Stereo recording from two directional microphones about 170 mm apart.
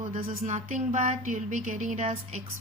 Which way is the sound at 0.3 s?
45° right (ahead or behind).